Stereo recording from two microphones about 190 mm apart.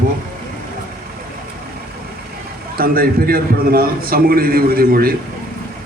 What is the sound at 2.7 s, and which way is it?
A man's voice, 50° right (ahead or behind).